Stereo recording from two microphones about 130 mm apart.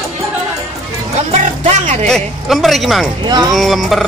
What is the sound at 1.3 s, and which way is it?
Music, 55° right (ahead or behind).